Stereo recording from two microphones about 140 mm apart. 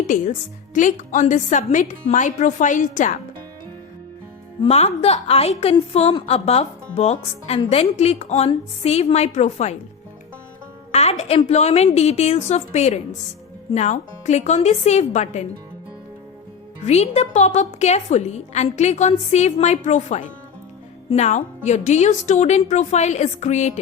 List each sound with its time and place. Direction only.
0.0 s a woman's voice: 65° left (ahead or behind)
4.7 s speech: 50° left (ahead or behind)
10.9 s music: 50° left (ahead or behind)
11.4 s a woman's voice: 50° left (ahead or behind)
16.8 s a woman's voice: 50° left (ahead or behind)